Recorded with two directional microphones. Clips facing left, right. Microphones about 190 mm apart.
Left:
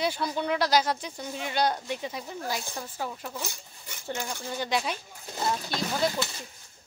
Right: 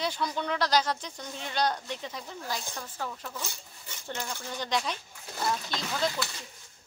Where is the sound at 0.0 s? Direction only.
10° left (ahead or behind).